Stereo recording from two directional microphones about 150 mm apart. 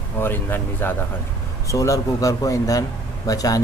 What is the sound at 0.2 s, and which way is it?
Speech, 15° left (ahead or behind).